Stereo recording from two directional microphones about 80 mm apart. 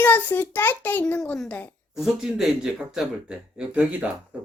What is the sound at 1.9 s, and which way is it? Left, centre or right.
Speech, centre.